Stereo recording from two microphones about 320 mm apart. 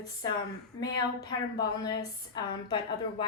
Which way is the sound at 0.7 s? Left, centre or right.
Centre.